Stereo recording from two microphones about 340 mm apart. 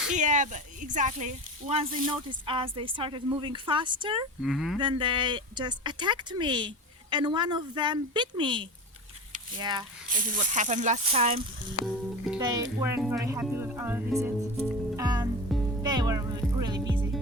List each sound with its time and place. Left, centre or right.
0.1 s speech: right
4.4 s insect: centre
4.8 s speech: centre
9.3 s a sound: centre
10.1 s speech: right
12.4 s music: centre